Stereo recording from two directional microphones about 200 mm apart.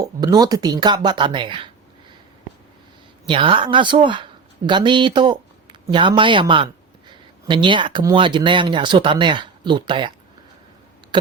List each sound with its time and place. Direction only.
0.0 s a woman's voice: 20° right (ahead or behind)
3.2 s a woman's voice: 25° right (ahead or behind)